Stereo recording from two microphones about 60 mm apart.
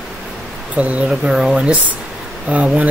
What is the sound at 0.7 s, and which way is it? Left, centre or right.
Speech, right.